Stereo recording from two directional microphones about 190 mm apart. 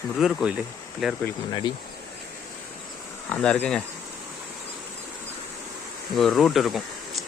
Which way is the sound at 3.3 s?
5° left (ahead or behind).